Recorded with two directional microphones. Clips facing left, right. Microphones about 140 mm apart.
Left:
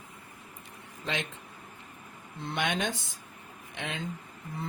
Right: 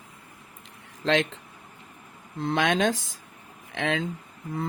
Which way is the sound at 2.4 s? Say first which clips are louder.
Right 8 dB; 90° right.